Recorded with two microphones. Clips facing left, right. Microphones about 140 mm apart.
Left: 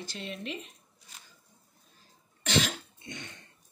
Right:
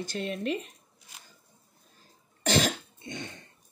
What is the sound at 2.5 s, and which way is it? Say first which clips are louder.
Cough: right 3 dB; 40° right (ahead or behind).